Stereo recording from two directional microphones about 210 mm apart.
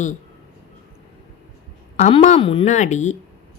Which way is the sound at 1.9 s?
35° left (ahead or behind).